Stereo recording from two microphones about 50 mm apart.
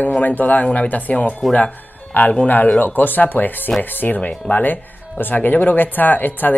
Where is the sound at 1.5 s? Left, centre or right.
Left.